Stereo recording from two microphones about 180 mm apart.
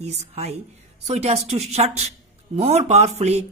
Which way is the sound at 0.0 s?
35° right (ahead or behind).